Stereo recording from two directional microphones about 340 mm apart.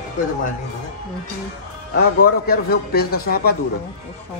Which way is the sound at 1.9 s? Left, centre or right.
Left.